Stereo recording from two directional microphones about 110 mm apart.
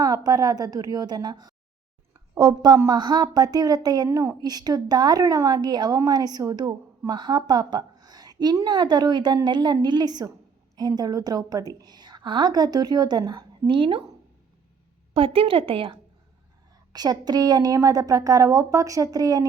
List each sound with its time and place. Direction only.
0.0 s a woman's voice: 35° right (ahead or behind)
15.1 s a woman's voice: 55° right (ahead or behind)
16.9 s a woman's voice: 35° right (ahead or behind)